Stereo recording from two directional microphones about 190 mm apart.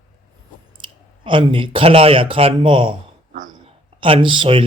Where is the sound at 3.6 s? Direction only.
30° right (ahead or behind).